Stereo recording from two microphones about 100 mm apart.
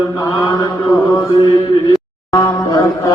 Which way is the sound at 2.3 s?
35° left (ahead or behind).